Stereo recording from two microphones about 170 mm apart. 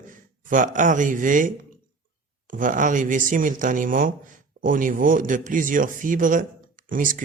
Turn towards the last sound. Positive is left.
turn(degrees=-50)  # may be behind; listen again after turning